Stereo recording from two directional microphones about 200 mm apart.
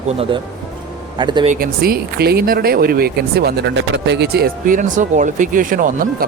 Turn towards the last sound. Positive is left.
turn(degrees=-40)  # may be behind; listen again after turning